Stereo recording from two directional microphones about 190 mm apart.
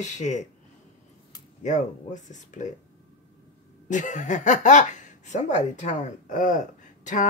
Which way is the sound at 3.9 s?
40° left (ahead or behind).